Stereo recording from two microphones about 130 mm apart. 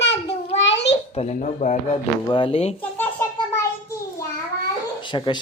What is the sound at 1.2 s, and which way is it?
Speech, 60° left (ahead or behind).